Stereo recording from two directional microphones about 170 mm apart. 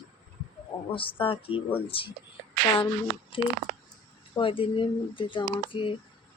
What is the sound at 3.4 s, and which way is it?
Speech, 30° left (ahead or behind).